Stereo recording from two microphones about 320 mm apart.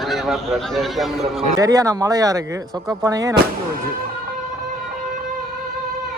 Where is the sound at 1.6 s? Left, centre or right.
Centre.